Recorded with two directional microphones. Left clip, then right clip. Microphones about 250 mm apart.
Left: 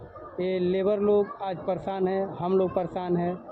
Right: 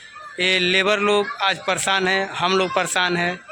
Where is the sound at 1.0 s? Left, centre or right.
Right.